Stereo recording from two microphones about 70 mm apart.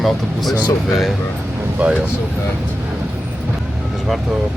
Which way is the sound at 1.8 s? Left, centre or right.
Centre.